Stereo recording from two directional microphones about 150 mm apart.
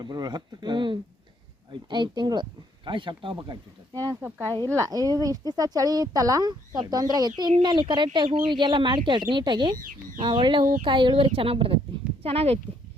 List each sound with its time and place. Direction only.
0.0 s speech: 30° right (ahead or behind)